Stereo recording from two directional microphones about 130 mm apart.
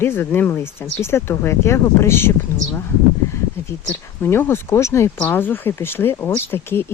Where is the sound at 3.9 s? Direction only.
15° left (ahead or behind).